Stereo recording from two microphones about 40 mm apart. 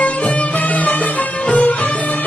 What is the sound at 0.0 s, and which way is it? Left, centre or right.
Music, left.